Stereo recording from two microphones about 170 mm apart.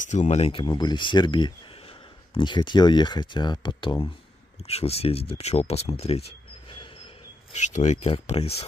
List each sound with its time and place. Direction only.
0.0 s speech: 45° left (ahead or behind)